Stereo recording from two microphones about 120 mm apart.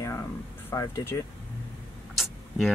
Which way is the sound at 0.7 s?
25° left (ahead or behind).